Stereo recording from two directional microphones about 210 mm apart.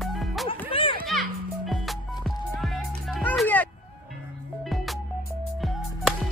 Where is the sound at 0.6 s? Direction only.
25° left (ahead or behind).